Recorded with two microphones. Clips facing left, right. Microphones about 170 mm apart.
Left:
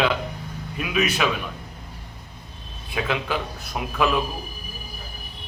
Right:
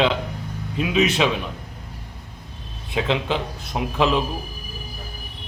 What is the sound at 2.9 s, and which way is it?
A man's voice, 20° right (ahead or behind).